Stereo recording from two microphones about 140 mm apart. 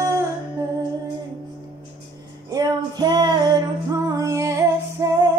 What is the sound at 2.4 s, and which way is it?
Music, 25° right (ahead or behind).